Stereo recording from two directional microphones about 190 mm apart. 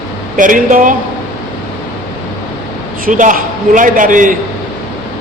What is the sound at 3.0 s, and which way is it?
A man's voice, 45° right (ahead or behind).